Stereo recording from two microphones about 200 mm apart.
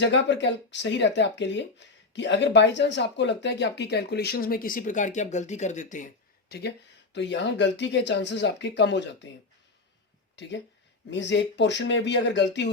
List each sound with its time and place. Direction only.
0.0 s speech: 60° left (ahead or behind); by 6.1 s 40° left (ahead or behind)
6.5 s speech: 55° left (ahead or behind)
10.3 s speech: 60° left (ahead or behind)